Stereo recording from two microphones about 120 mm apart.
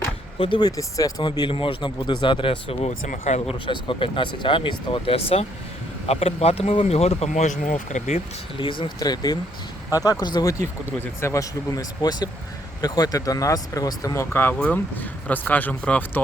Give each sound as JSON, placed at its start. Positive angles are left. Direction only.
{"t": 0.3, "sound": "speech", "side_deg": 45}
{"t": 0.8, "sound": "speech", "side_deg": 30}
{"t": 1.2, "sound": "speech", "side_deg": 45}
{"t": 2.8, "sound": "speech", "side_deg": 80}
{"t": 3.7, "sound": "speech", "side_deg": 45}
{"t": 8.5, "sound": "speech", "side_deg": 45}
{"t": 9.0, "sound": "speech", "side_deg": 35}
{"t": 11.0, "sound": "speech", "side_deg": 25}